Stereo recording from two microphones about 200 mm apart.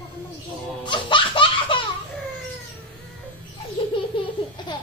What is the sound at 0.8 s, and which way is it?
Laughter, 25° left (ahead or behind).